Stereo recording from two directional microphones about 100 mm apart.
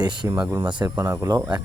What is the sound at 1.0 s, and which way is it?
Speech, 25° right (ahead or behind).